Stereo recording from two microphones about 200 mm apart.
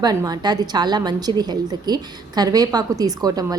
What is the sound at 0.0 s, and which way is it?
A woman's voice, 20° right (ahead or behind).